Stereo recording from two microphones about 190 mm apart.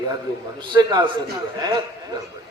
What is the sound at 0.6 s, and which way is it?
Speech, 25° right (ahead or behind).